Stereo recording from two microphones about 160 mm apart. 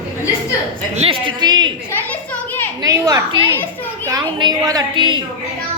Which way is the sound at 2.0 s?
10° left (ahead or behind).